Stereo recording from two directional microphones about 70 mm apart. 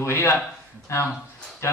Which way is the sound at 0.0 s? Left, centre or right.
Left.